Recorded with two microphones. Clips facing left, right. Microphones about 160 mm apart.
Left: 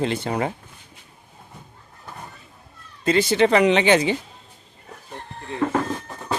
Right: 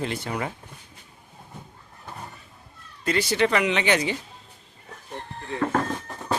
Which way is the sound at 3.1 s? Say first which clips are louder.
Left 5 dB; 25° left (ahead or behind).